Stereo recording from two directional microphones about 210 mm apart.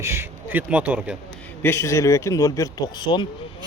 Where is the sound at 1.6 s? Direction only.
10° left (ahead or behind).